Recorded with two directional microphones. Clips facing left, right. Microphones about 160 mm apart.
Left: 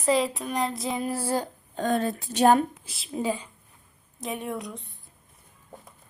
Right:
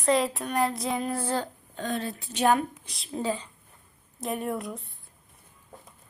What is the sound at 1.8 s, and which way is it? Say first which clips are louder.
Speech: left 6 dB; 45° left (ahead or behind).